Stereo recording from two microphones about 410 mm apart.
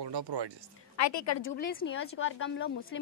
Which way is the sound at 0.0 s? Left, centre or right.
Right.